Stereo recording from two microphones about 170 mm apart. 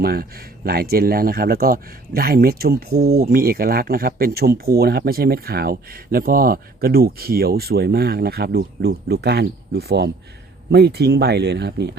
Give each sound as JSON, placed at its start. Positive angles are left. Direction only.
{"t": 0.0, "sound": "speech", "side_deg": -60}